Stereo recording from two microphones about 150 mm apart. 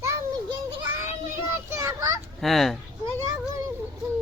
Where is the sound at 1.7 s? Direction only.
20° right (ahead or behind).